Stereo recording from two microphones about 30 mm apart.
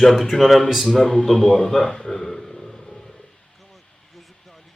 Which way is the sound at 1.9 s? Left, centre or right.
Left.